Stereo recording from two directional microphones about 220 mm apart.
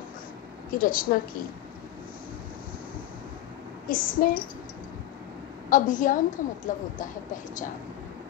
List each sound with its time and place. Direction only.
0.7 s a woman's voice: 40° left (ahead or behind)
3.9 s a woman's voice: 40° left (ahead or behind)
5.7 s a woman's voice: 35° left (ahead or behind)